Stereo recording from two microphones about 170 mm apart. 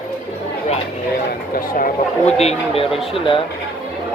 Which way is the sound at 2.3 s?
40° left (ahead or behind).